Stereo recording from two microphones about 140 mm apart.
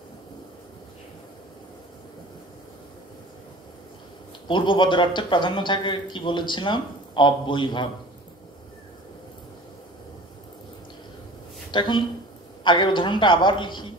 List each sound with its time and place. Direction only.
4.5 s a man's voice: 35° left (ahead or behind)
11.7 s a man's voice: 35° left (ahead or behind)